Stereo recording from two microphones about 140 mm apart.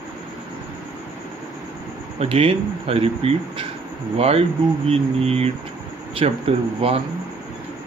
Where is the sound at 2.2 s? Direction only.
45° right (ahead or behind).